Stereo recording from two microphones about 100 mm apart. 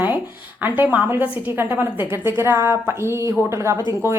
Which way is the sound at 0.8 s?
15° right (ahead or behind).